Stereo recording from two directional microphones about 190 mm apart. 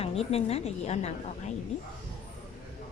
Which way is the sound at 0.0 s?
30° left (ahead or behind).